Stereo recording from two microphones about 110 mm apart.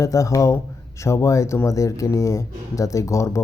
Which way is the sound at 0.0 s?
30° left (ahead or behind).